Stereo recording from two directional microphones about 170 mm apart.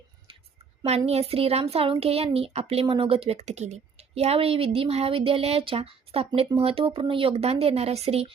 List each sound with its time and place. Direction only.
0.9 s a woman's voice: 35° right (ahead or behind)